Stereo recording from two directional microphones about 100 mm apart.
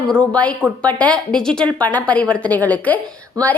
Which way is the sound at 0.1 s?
10° left (ahead or behind).